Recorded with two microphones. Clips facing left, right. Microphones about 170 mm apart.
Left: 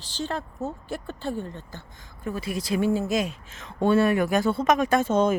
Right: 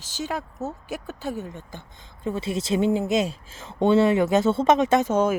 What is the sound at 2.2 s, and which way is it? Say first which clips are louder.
A woman's voice: right 3 dB; 25° right (ahead or behind).